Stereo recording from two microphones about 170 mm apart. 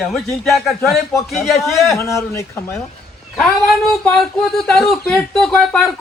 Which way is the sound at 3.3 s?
5° left (ahead or behind).